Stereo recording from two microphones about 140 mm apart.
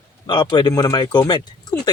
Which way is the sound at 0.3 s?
30° left (ahead or behind).